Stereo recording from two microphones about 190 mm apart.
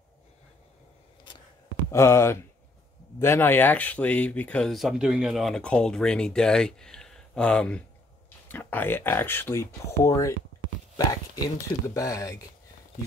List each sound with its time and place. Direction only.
1.9 s speech: 15° left (ahead or behind)